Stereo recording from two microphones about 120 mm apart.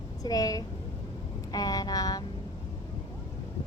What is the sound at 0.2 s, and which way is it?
A woman's voice, 30° left (ahead or behind).